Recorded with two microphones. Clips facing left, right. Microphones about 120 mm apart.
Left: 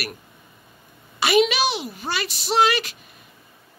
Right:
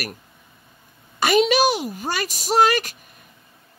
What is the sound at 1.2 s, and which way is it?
Speech, 45° right (ahead or behind).